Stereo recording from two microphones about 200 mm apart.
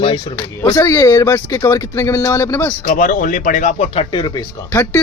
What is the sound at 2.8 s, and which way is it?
Speech, 40° left (ahead or behind).